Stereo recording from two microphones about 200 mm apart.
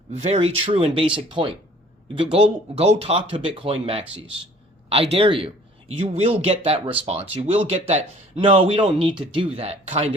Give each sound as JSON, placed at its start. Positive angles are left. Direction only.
{"t": 0.1, "sound": "speech", "side_deg": -30}